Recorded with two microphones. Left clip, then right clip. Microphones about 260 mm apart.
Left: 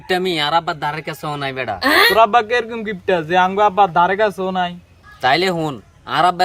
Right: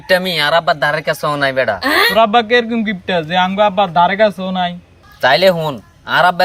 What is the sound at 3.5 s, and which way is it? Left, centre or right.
Speech, centre.